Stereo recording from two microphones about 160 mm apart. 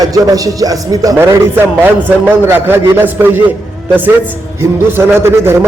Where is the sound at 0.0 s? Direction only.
20° right (ahead or behind).